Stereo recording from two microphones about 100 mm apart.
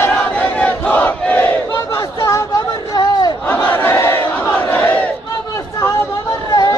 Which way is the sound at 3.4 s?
20° left (ahead or behind).